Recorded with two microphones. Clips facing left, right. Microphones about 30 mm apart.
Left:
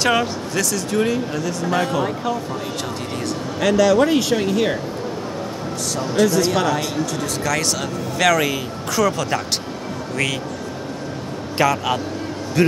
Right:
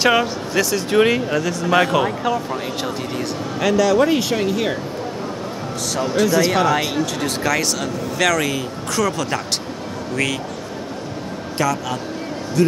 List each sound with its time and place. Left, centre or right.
0.0 s speech: centre
0.8 s speech: right
1.1 s speech: right
1.7 s speech: right
3.2 s speech: centre
6.1 s speech: centre
11.5 s a man's voice: left